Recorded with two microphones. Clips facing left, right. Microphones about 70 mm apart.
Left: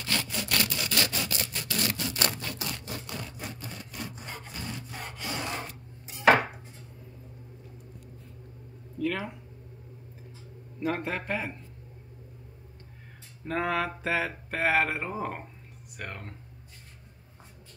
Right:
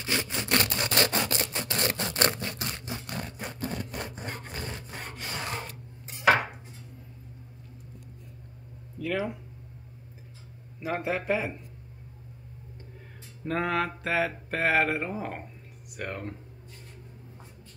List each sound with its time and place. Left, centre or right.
0.0 s sawing: right
2.7 s a sound: centre
3.1 s wood: right
8.9 s speech: centre
10.8 s mantra: centre
13.5 s mantra: centre